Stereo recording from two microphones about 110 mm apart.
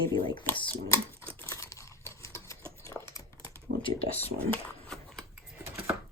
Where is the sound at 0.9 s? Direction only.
20° left (ahead or behind).